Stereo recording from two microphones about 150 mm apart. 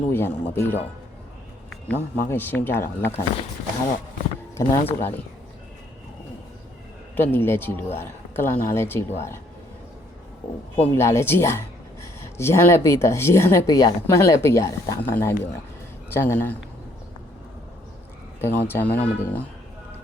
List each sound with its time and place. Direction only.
0.1 s speech: 15° left (ahead or behind)
4.5 s speech: 15° left (ahead or behind)
7.2 s speech: 15° left (ahead or behind)
10.9 s speech: 15° left (ahead or behind)
18.3 s speech: 15° left (ahead or behind)